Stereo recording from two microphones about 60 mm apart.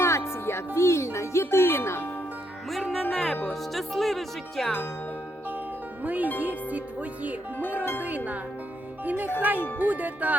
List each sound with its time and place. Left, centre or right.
0.0 s music: left
2.9 s speech: centre
6.0 s speech: right
6.4 s music: right